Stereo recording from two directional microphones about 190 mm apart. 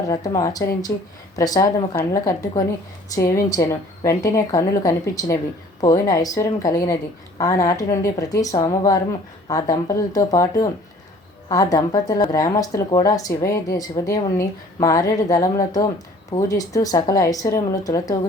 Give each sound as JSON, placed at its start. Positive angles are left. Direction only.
{"t": 0.1, "sound": "a woman's voice", "side_deg": 20}